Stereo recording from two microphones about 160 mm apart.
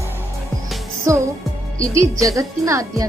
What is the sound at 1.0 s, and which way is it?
A woman's voice, 20° right (ahead or behind).